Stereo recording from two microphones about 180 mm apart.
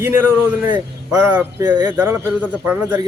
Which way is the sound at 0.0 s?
15° right (ahead or behind).